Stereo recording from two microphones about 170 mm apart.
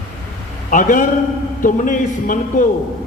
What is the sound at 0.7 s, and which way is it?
A man's voice, 50° left (ahead or behind).